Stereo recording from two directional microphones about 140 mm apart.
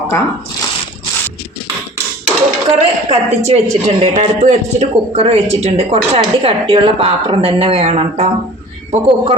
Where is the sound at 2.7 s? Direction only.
50° right (ahead or behind).